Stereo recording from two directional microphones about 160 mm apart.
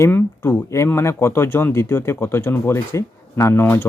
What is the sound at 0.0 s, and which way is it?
Speech, 15° left (ahead or behind).